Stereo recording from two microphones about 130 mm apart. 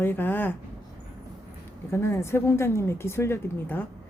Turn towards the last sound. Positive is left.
turn(degrees=15)  # may be behind; listen again after turning